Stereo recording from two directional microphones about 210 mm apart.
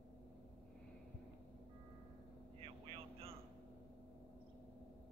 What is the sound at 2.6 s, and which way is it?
Vehicle, 25° right (ahead or behind).